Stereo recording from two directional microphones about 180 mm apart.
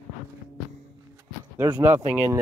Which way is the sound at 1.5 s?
20° right (ahead or behind).